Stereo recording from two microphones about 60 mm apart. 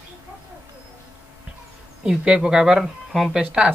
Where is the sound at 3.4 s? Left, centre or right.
Centre.